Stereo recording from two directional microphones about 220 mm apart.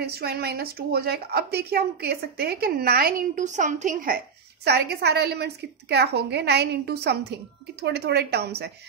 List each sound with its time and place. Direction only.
0.0 s speech: 45° right (ahead or behind)
4.6 s speech: 50° right (ahead or behind)